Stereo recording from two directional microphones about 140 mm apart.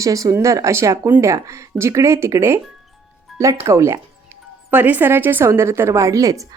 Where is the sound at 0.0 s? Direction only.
25° right (ahead or behind).